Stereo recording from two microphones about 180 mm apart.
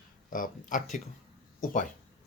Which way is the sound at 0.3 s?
50° left (ahead or behind).